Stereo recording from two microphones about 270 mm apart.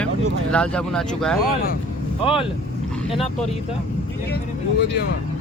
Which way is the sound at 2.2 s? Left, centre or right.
Centre.